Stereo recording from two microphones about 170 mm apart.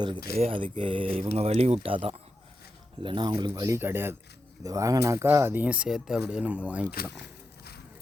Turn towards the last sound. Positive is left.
turn(degrees=-10)  # may be behind; listen again after turning